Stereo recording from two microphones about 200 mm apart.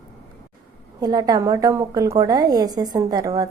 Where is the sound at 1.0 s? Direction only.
20° right (ahead or behind).